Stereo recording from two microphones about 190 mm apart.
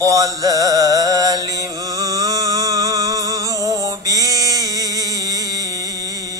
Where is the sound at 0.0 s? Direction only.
20° right (ahead or behind).